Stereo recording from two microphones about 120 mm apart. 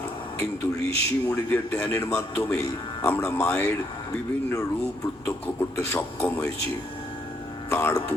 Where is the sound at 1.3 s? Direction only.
15° left (ahead or behind).